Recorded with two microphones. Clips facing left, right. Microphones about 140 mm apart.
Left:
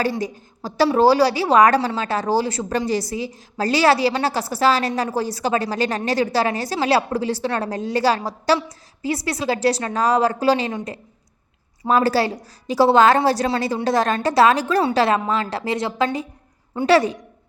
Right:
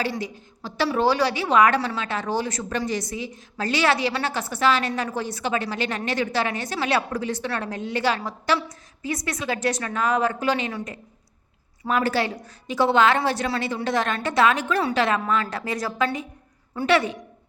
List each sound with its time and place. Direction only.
0.0 s a woman's voice: 40° left (ahead or behind)
11.8 s a woman's voice: 35° left (ahead or behind)